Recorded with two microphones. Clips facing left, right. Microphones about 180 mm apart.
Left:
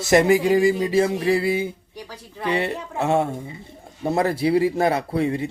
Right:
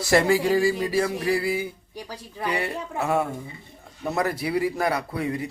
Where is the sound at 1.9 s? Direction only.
15° right (ahead or behind).